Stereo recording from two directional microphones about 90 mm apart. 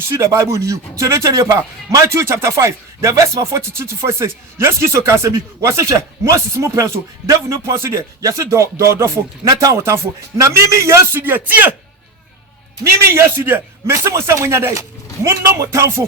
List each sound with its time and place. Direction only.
0.1 s a man's voice: 35° right (ahead or behind)
9.4 s a man's voice: 40° right (ahead or behind); by 11.7 s 20° right (ahead or behind)
12.8 s a man's voice: 25° right (ahead or behind)